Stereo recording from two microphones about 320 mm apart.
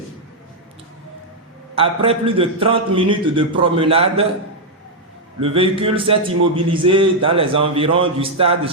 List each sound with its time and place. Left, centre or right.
1.7 s a man's voice: centre
5.4 s a man's voice: centre